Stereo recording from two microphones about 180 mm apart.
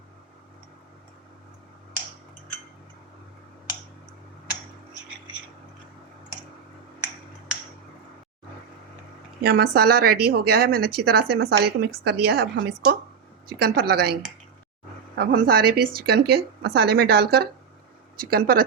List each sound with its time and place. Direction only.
9.4 s a woman's voice: 60° right (ahead or behind)
13.5 s a woman's voice: 55° right (ahead or behind)